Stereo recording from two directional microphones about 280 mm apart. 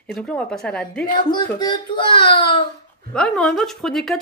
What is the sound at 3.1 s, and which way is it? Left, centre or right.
Speech, centre.